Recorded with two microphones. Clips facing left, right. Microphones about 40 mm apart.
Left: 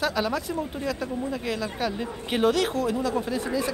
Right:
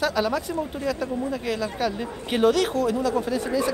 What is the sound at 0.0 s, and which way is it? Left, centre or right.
A woman's voice, centre.